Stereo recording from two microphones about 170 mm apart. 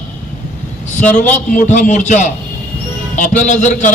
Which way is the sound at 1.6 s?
45° left (ahead or behind).